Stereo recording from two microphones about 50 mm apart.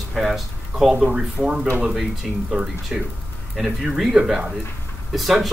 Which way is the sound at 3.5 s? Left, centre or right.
Centre.